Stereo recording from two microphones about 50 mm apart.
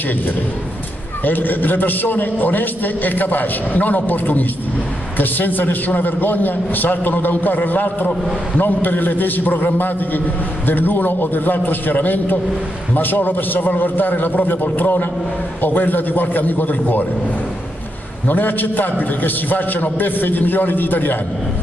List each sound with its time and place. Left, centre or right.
1.2 s a man's voice: left
18.2 s a man's voice: left